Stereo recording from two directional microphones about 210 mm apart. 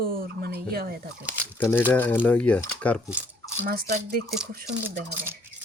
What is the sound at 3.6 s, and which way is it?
Speech, 45° right (ahead or behind).